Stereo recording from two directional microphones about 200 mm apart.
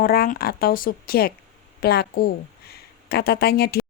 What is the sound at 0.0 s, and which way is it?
Speech, 50° left (ahead or behind).